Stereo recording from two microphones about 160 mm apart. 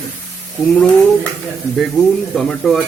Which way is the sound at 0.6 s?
5° left (ahead or behind).